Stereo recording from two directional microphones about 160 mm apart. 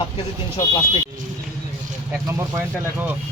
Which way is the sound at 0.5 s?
30° left (ahead or behind).